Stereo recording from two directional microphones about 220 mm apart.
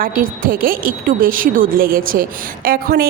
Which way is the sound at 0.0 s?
40° right (ahead or behind).